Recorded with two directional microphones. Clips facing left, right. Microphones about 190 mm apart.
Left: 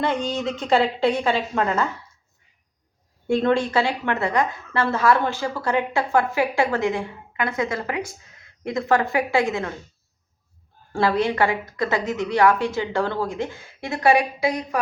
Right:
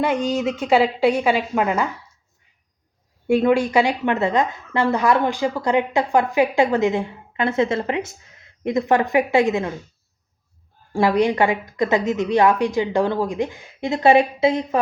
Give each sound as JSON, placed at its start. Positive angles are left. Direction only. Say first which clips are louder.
{"t": 0.0, "sound": "a woman's voice", "louder": "right 3 dB", "side_deg": -10}
{"t": 3.2, "sound": "a woman's voice", "louder": "right 3 dB", "side_deg": -10}
{"t": 10.9, "sound": "a woman's voice", "louder": "right 3 dB", "side_deg": -15}